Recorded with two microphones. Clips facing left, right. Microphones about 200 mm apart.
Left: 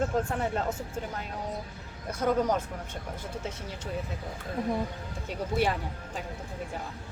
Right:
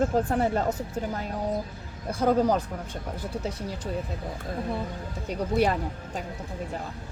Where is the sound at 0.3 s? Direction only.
35° right (ahead or behind).